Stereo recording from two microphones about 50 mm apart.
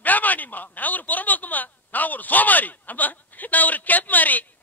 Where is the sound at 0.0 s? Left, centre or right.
Left.